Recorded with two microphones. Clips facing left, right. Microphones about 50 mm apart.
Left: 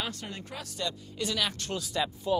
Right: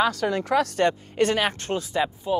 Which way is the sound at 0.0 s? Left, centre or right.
Right.